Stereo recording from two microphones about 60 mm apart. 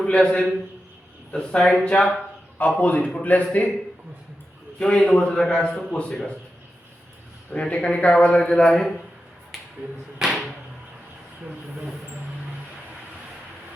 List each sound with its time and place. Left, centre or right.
0.0 s a man's voice: centre
4.8 s a man's voice: centre
7.5 s a man's voice: centre
10.2 s arrow: centre